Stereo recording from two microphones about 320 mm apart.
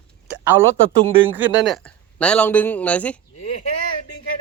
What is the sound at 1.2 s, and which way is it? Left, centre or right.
Speech, centre.